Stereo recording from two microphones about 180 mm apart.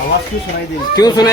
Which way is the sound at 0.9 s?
20° left (ahead or behind).